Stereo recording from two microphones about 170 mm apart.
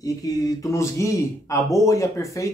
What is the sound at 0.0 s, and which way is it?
Speech, 20° left (ahead or behind).